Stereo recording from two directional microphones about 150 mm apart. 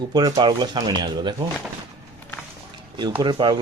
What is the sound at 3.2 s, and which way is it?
Speech, 30° right (ahead or behind).